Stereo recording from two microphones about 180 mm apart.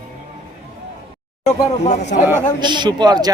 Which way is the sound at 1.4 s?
40° left (ahead or behind).